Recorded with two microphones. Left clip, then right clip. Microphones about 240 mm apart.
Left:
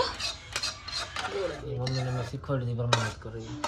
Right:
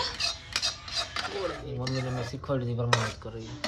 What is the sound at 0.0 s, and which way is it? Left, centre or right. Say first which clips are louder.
Cutlery: even; centre.